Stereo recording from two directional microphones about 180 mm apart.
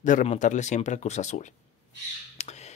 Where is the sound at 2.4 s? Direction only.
40° left (ahead or behind).